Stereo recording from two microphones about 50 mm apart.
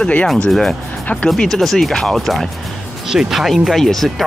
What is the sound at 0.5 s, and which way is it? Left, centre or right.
Speech, centre.